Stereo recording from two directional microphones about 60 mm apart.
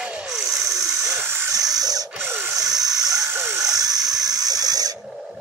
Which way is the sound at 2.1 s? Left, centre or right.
Right.